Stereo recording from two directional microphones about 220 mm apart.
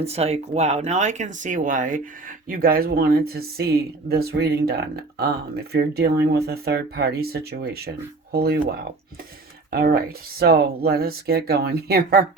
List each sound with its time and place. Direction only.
0.0 s speech: 30° right (ahead or behind); by 12.2 s 45° right (ahead or behind)